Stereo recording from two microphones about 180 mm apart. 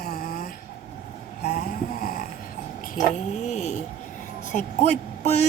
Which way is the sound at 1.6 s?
55° left (ahead or behind).